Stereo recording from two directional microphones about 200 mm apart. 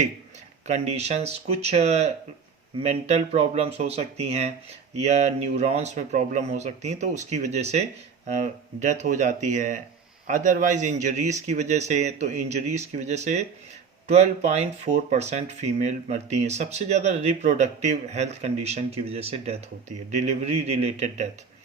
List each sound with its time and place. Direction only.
0.7 s speech: 35° right (ahead or behind)